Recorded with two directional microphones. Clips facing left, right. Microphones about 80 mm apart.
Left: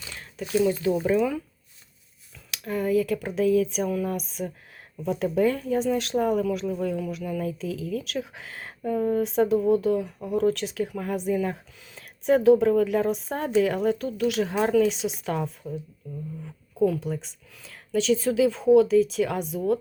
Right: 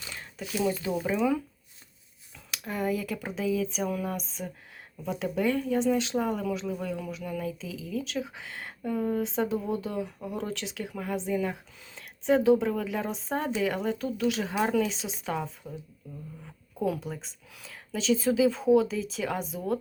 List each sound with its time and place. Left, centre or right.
1.1 s speech: right
2.6 s speech: centre
14.8 s speech: centre
17.0 s speech: centre